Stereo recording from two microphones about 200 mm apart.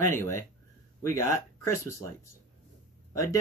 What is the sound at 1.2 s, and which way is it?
Speech, 15° left (ahead or behind).